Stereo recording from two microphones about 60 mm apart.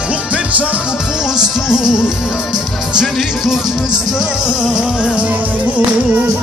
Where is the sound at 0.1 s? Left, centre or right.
Right.